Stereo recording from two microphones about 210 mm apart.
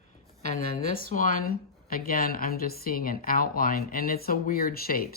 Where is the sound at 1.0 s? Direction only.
40° left (ahead or behind).